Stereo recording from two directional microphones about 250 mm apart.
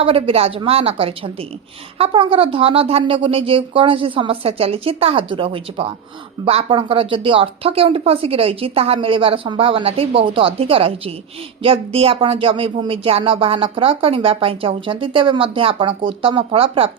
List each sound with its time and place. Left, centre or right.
0.0 s speech: right